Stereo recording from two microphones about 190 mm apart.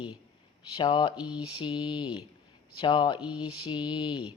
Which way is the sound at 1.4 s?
30° left (ahead or behind).